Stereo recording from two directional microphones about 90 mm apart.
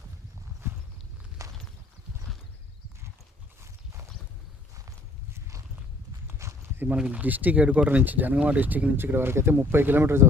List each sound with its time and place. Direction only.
1.4 s horse: 40° right (ahead or behind)
5.3 s walk: 35° right (ahead or behind)
6.8 s speech: 15° right (ahead or behind)